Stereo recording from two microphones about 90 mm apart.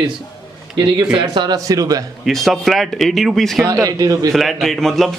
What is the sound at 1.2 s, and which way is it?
Speech, 50° right (ahead or behind).